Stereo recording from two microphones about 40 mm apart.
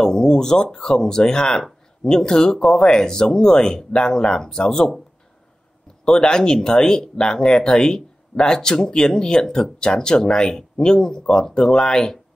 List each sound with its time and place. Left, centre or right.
0.0 s speech: centre
6.0 s speech: centre